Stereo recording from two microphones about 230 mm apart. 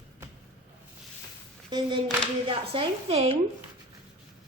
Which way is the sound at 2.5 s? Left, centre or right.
Right.